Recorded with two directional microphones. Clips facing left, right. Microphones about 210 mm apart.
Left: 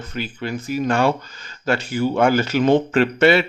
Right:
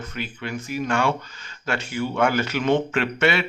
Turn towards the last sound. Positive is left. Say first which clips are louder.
# left 7 dB
turn(degrees=35)  # may be behind; listen again after turning